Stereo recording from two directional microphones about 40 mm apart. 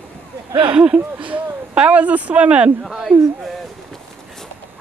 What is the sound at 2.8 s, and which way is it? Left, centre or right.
Speech, centre.